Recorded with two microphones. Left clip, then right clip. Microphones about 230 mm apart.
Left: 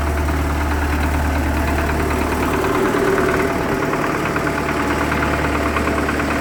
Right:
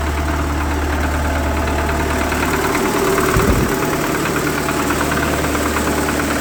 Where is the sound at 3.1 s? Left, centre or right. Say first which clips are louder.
Right 1 dB; right.